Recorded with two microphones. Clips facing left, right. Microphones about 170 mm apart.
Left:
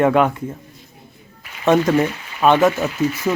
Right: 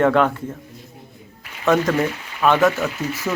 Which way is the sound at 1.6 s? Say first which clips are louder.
Left 3 dB; 20° left (ahead or behind).